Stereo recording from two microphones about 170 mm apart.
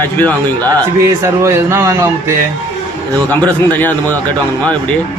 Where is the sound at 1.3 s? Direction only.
15° right (ahead or behind).